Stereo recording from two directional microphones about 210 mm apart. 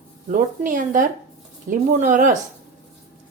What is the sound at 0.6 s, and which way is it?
A woman's voice, 40° right (ahead or behind).